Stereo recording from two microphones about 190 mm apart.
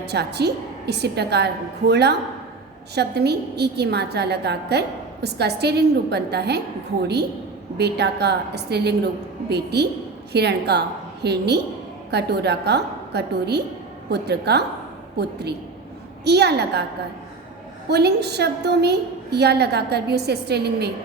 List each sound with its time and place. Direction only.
0.0 s a woman's voice: 60° right (ahead or behind)
7.8 s a woman's voice: 60° right (ahead or behind)
17.8 s a woman's voice: 60° right (ahead or behind)